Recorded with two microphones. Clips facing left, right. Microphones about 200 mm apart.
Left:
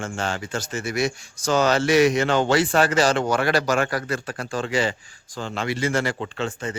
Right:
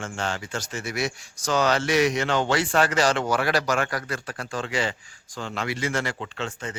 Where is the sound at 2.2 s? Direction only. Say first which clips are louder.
Left 4 dB; 45° left (ahead or behind).